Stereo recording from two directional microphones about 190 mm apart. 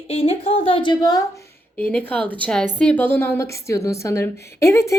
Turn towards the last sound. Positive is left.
turn(degrees=15)  # may be behind; listen again after turning